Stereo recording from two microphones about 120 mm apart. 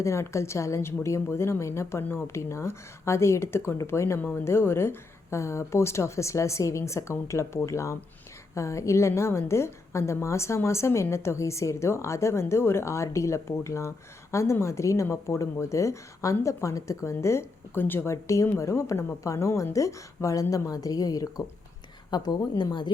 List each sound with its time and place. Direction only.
0.0 s a woman's voice: 25° left (ahead or behind); by 22.9 s 40° left (ahead or behind)